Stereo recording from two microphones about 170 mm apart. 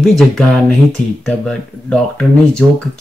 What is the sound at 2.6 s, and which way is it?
Speech, 5° left (ahead or behind).